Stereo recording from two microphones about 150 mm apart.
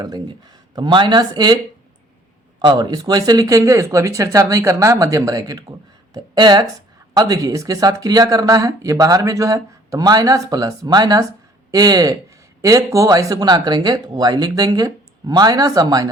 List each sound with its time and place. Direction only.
0.0 s speech: 25° right (ahead or behind)
2.6 s speech: 30° right (ahead or behind)